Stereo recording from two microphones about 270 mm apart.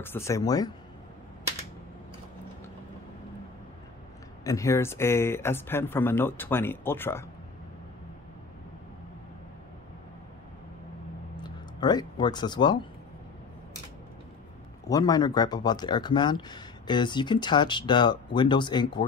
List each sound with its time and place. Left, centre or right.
0.0 s speech: centre
4.5 s speech: centre
11.4 s speech: centre
14.9 s speech: centre